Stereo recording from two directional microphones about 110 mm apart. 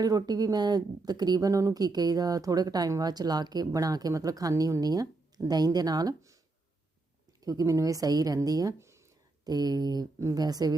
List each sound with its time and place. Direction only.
0.0 s speech: 35° right (ahead or behind)
7.4 s speech: 30° right (ahead or behind)